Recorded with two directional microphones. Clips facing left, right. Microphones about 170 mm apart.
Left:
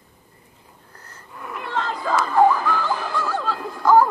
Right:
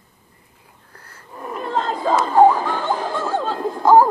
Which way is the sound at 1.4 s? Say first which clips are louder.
Right 4 dB; 35° right (ahead or behind).